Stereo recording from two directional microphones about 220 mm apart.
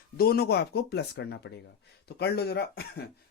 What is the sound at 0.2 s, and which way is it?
Speech, 45° left (ahead or behind).